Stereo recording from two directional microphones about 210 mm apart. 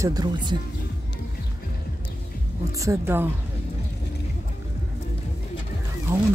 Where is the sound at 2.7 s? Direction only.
15° right (ahead or behind).